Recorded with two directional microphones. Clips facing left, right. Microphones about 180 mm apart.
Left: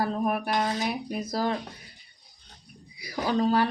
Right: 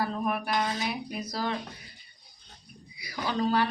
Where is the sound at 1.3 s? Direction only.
45° left (ahead or behind).